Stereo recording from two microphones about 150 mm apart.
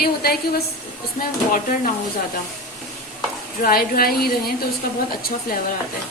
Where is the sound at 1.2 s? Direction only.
65° left (ahead or behind).